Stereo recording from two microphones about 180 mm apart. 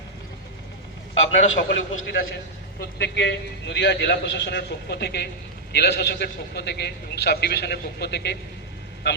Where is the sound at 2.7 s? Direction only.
70° left (ahead or behind).